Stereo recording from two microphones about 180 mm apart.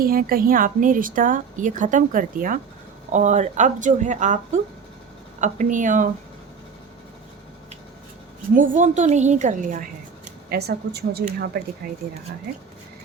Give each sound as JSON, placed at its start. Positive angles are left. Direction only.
{"t": 0.0, "sound": "speech", "side_deg": -55}
{"t": 8.5, "sound": "speech", "side_deg": -50}
{"t": 10.5, "sound": "a woman's voice", "side_deg": -60}